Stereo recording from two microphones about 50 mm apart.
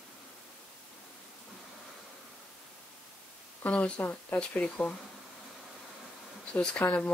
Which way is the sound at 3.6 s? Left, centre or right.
Left.